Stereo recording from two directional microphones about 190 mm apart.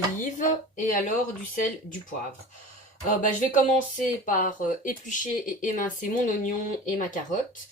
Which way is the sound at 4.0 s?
45° left (ahead or behind).